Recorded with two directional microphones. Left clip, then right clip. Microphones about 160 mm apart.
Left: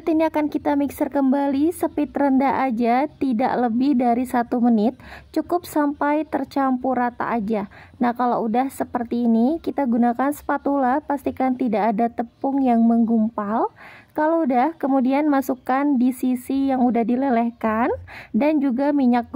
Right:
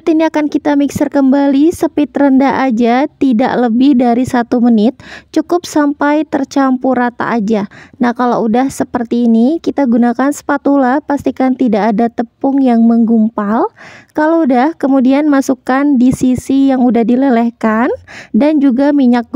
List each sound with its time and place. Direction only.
0.0 s speech: 40° right (ahead or behind)